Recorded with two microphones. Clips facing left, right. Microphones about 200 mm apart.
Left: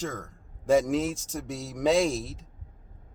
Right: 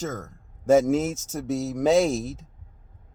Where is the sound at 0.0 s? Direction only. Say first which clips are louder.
Right 3 dB; 40° right (ahead or behind).